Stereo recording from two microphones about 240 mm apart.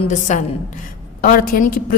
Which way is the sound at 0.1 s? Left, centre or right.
Left.